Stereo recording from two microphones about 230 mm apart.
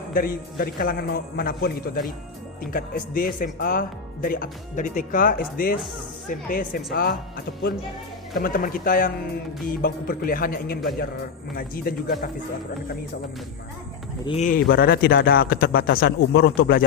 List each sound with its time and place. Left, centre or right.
0.1 s speech: left
14.3 s speech: left